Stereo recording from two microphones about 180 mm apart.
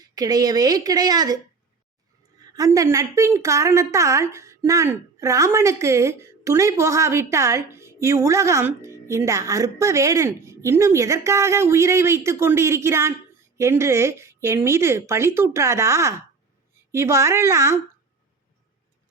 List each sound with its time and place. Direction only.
0.0 s a woman's voice: 20° right (ahead or behind)
2.5 s a woman's voice: 20° right (ahead or behind)